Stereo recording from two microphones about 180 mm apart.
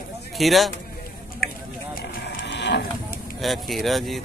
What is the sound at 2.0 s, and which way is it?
Vehicle, 50° left (ahead or behind).